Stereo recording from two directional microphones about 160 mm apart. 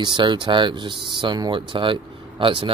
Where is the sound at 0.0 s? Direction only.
30° right (ahead or behind).